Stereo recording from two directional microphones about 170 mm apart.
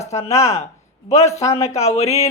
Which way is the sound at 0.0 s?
40° left (ahead or behind).